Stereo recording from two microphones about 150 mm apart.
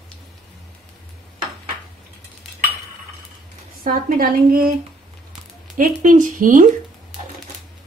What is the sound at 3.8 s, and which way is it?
Speech, 75° right (ahead or behind).